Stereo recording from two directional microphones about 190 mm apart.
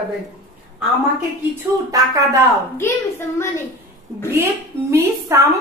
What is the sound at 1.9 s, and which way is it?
Speech, 15° right (ahead or behind).